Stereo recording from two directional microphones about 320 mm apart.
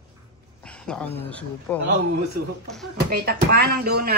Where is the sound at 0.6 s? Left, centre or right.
Centre.